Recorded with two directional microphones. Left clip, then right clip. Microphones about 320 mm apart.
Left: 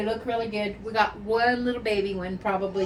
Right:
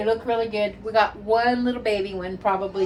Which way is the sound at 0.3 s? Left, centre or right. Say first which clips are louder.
Right 5 dB; centre.